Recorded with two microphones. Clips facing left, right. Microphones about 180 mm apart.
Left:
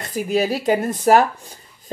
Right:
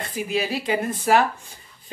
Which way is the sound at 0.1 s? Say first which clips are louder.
Left 6 dB; 40° left (ahead or behind).